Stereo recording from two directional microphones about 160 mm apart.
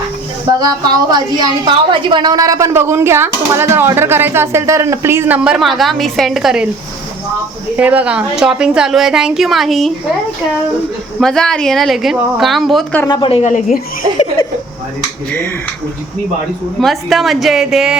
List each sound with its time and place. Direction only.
1.1 s a woman's voice: 25° right (ahead or behind); by 6.7 s 5° right (ahead or behind)
7.8 s a woman's voice: 10° right (ahead or behind)
11.2 s a woman's voice: 5° left (ahead or behind)
13.1 s speech: 30° left (ahead or behind)
13.4 s speech: 45° left (ahead or behind)
16.8 s a woman's voice: centre (ahead or behind)